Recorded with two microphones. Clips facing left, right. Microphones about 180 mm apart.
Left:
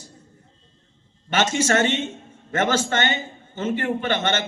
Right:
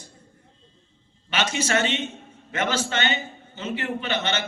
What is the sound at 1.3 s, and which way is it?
A man's voice, 45° left (ahead or behind).